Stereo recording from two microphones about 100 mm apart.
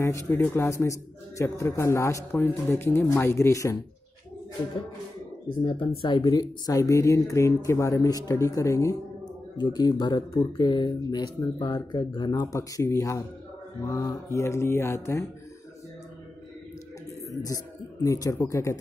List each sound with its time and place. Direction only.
0.0 s mantra: 30° left (ahead or behind)
1.4 s speech: 30° left (ahead or behind)
2.4 s mantra: 20° left (ahead or behind)
3.2 s speech: 30° left (ahead or behind)
5.6 s speech: 50° left (ahead or behind)
6.3 s speech: 40° left (ahead or behind)
9.6 s speech: 45° left (ahead or behind)
12.5 s speech: 30° left (ahead or behind)
13.8 s mantra: 30° left (ahead or behind)
17.3 s speech: 35° left (ahead or behind)